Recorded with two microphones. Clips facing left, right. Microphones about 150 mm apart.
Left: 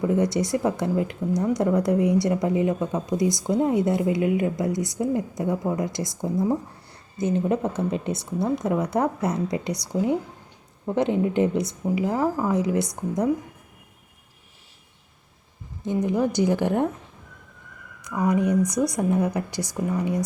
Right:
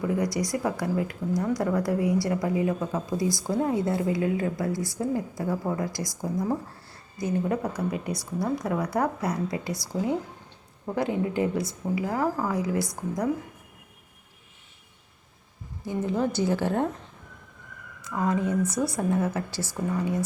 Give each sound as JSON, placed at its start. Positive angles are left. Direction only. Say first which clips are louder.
{"t": 0.0, "sound": "speech", "louder": "left 4 dB", "side_deg": 25}
{"t": 15.8, "sound": "a woman's voice", "louder": "left 4 dB", "side_deg": 20}
{"t": 18.0, "sound": "a woman's voice", "louder": "left 4 dB", "side_deg": 15}